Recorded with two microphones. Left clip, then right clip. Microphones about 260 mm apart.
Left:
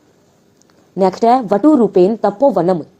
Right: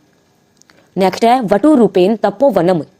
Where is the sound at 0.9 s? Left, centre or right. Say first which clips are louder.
Right 1 dB; right.